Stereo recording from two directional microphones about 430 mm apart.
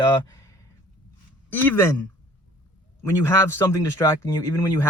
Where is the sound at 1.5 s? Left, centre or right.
Centre.